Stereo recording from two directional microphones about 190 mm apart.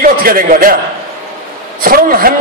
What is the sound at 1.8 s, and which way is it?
Speech, 50° right (ahead or behind).